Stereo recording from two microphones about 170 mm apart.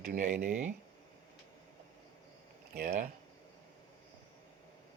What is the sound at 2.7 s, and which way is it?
Speech, 50° right (ahead or behind).